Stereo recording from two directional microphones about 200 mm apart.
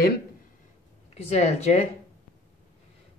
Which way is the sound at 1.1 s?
35° left (ahead or behind).